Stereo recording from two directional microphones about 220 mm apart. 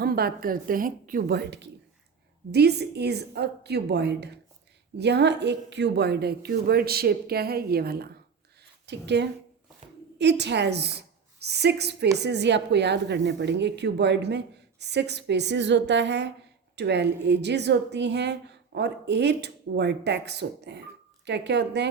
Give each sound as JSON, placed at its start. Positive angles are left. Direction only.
{"t": 0.0, "sound": "a woman's voice", "side_deg": -45}